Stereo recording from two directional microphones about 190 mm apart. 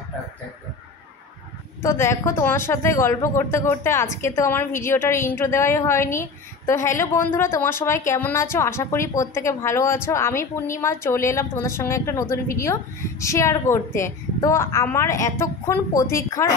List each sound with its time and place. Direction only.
1.8 s a woman's voice: 15° left (ahead or behind)